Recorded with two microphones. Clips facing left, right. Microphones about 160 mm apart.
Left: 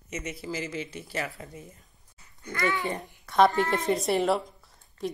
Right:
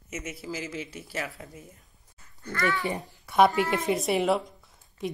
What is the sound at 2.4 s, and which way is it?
Speech, 20° left (ahead or behind).